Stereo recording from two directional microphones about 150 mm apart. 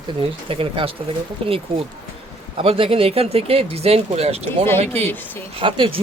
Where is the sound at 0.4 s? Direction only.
40° right (ahead or behind).